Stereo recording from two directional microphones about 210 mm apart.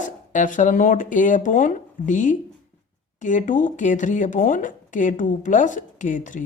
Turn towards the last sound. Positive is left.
turn(degrees=40)  # may be behind; listen again after turning